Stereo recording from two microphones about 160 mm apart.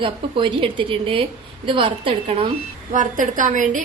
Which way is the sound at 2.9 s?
55° right (ahead or behind).